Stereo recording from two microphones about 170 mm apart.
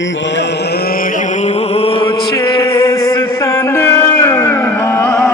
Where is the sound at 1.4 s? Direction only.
35° left (ahead or behind).